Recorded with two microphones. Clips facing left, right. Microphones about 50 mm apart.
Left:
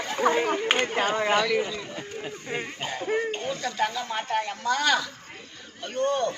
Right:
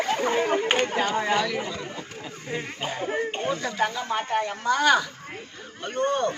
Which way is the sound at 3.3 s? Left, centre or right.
Right.